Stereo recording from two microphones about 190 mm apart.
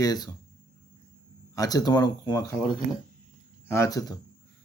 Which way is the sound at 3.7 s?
15° left (ahead or behind).